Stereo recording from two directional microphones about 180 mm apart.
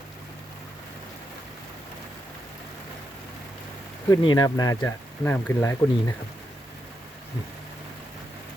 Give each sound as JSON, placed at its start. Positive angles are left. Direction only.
{"t": 4.1, "sound": "speech", "side_deg": 25}